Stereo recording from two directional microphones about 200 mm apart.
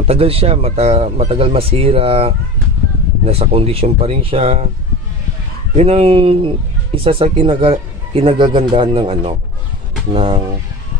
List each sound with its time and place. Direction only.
0.0 s speech: 30° right (ahead or behind)
5.8 s speech: 30° right (ahead or behind)